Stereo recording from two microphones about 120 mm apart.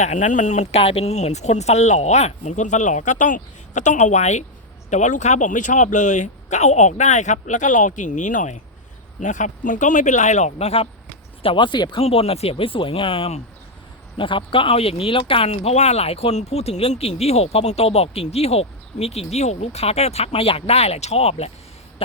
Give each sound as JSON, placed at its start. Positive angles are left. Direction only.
{"t": 0.0, "sound": "speech", "side_deg": 90}
{"t": 4.9, "sound": "speech", "side_deg": 85}
{"t": 11.4, "sound": "speech", "side_deg": 40}
{"t": 12.0, "sound": "speech", "side_deg": 55}